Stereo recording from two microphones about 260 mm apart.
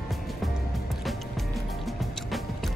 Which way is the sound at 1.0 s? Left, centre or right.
Centre.